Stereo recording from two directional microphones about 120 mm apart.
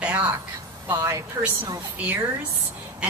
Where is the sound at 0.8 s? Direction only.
25° right (ahead or behind).